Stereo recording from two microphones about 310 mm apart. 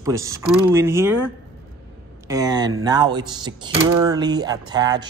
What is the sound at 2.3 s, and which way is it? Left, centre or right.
Speech, centre.